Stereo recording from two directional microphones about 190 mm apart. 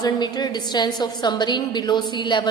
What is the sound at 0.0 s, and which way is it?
A woman's voice, 20° left (ahead or behind).